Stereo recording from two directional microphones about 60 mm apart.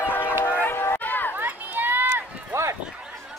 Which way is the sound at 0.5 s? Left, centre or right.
Left.